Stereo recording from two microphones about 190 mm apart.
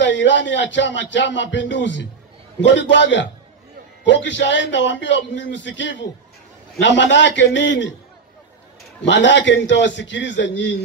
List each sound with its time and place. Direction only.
0.0 s speech: 70° left (ahead or behind)
9.0 s speech: 70° left (ahead or behind)